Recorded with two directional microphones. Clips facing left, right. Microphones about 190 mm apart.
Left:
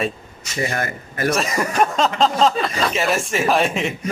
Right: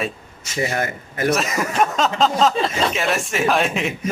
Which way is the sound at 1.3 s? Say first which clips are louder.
Left 1 dB; centre (ahead or behind).